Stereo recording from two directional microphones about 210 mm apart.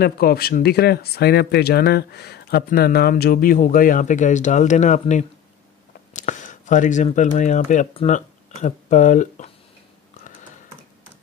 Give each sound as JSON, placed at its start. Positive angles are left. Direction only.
{"t": 0.0, "sound": "speech", "side_deg": 45}